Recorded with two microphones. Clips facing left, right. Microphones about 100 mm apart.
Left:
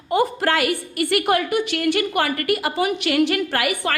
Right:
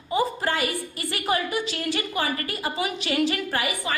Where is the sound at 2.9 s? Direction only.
60° left (ahead or behind).